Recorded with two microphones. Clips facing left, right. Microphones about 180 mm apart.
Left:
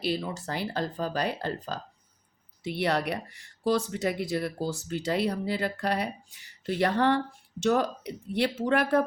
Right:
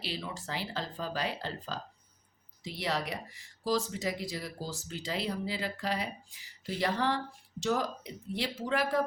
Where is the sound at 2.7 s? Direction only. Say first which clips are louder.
Left 7 dB; 65° left (ahead or behind).